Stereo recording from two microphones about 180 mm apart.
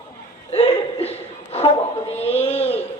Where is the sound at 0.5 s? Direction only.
35° left (ahead or behind).